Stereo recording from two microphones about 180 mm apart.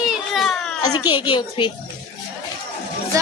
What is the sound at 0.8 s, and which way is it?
Speech, 20° left (ahead or behind).